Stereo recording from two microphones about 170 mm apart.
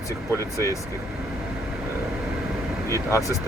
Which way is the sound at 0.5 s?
20° left (ahead or behind).